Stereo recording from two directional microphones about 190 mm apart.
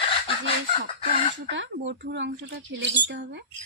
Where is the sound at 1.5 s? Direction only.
70° right (ahead or behind).